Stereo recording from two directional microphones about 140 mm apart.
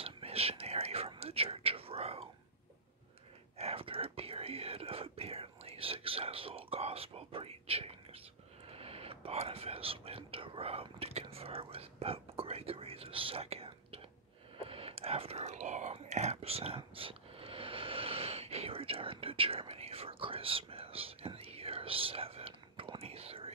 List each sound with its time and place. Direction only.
0.0 s whispering: 45° right (ahead or behind)
3.5 s whispering: 45° right (ahead or behind)